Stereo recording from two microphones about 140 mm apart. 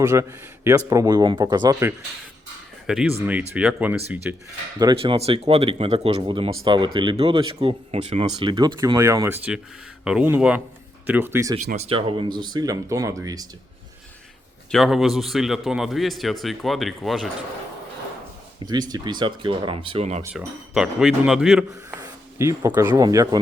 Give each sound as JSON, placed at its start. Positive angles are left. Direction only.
{"t": 0.0, "sound": "speech", "side_deg": -20}
{"t": 2.8, "sound": "speech", "side_deg": -5}
{"t": 4.8, "sound": "speech", "side_deg": -30}
{"t": 5.1, "sound": "speech", "side_deg": -45}
{"t": 6.2, "sound": "speech", "side_deg": -35}
{"t": 8.4, "sound": "speech", "side_deg": -30}
{"t": 10.0, "sound": "speech", "side_deg": -5}
{"t": 11.8, "sound": "speech", "side_deg": -40}
{"t": 14.7, "sound": "a man's voice", "side_deg": 0}
{"t": 18.6, "sound": "speech", "side_deg": -30}
{"t": 20.3, "sound": "a man's voice", "side_deg": -5}
{"t": 21.7, "sound": "speech", "side_deg": -25}
{"t": 22.9, "sound": "speech", "side_deg": -30}